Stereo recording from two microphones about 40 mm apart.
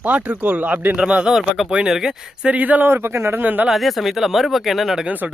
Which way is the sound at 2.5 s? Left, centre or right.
Right.